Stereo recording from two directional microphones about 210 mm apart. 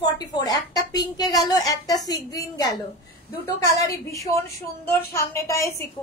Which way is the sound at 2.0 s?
20° left (ahead or behind).